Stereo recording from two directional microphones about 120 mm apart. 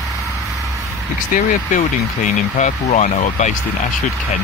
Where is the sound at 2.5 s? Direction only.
85° left.